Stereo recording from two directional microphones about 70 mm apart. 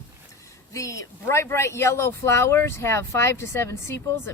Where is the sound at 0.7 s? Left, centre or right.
Left.